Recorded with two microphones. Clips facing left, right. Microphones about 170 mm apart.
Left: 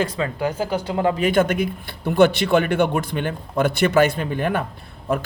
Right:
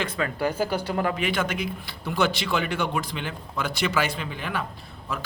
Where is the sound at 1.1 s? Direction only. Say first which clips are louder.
Left 8 dB; 45° left (ahead or behind).